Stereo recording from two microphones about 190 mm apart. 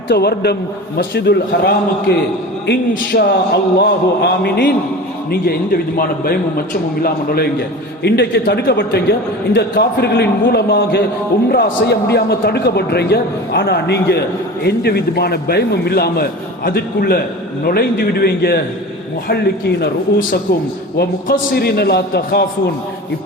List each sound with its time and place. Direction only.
0.1 s a man's voice: 55° left (ahead or behind)